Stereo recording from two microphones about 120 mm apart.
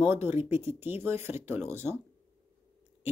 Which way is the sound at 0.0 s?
20° right (ahead or behind).